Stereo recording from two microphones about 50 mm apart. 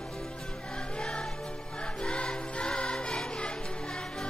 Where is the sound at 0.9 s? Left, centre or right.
Centre.